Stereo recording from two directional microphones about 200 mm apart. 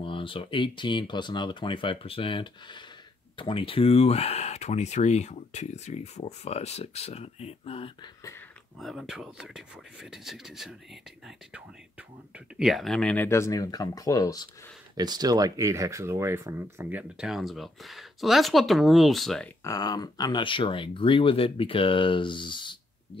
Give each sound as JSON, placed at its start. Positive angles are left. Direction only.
{"t": 0.0, "sound": "speech", "side_deg": 25}
{"t": 8.7, "sound": "speech", "side_deg": 0}
{"t": 15.0, "sound": "speech", "side_deg": -20}
{"t": 19.6, "sound": "speech", "side_deg": 20}